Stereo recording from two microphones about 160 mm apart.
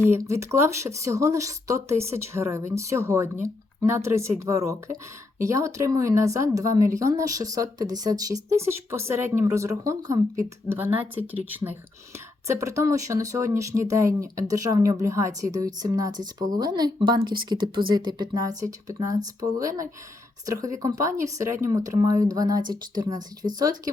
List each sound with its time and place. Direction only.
0.1 s speech: 20° right (ahead or behind)